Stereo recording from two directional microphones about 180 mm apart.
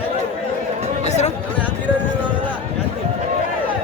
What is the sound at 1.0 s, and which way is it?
Speech, 40° left (ahead or behind).